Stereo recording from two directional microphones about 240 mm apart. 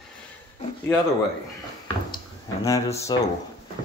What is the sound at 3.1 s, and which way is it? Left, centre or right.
Speech, centre.